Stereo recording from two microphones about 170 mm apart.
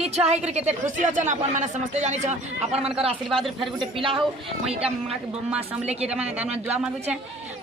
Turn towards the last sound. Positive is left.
turn(degrees=-40)  # may be behind; listen again after turning